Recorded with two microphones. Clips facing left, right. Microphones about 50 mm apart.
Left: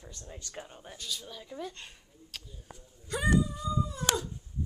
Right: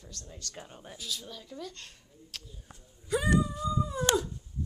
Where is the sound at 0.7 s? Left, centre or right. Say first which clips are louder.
Right 3 dB; centre.